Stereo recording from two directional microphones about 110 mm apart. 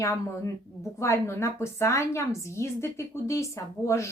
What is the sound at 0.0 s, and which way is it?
A woman's voice, 30° left (ahead or behind).